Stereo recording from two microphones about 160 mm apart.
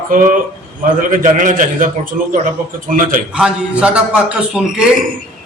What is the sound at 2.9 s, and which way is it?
Speech, 55° right (ahead or behind).